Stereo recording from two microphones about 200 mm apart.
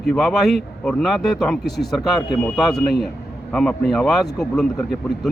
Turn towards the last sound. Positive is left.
turn(degrees=0)  # may be behind; listen again after turning